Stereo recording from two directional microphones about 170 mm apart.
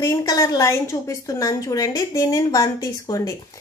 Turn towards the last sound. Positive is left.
turn(degrees=20)  # may be behind; listen again after turning